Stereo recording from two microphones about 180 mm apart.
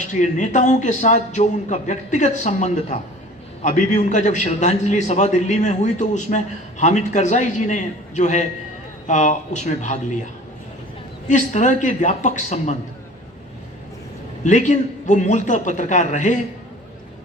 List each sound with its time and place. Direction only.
0.0 s a man's voice: 40° left (ahead or behind)
11.3 s a man's voice: 45° left (ahead or behind)
14.4 s a man's voice: 40° left (ahead or behind)